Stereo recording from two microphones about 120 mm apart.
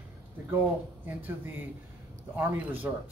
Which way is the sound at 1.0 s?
15° right (ahead or behind).